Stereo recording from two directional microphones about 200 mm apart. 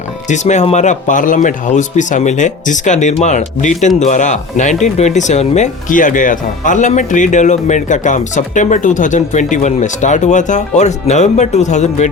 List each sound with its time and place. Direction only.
0.3 s speech: 35° left (ahead or behind)